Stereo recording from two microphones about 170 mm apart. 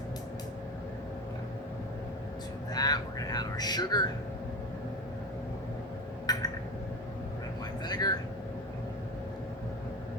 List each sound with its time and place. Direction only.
2.7 s speech: 25° left (ahead or behind)
6.3 s a sound: 25° left (ahead or behind)
7.9 s vehicle: 25° left (ahead or behind)